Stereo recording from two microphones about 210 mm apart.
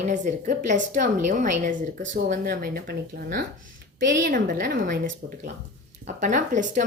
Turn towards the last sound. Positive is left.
turn(degrees=-35)  # may be behind; listen again after turning